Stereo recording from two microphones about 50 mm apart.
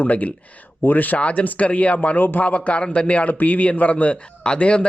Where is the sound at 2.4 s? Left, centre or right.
Left.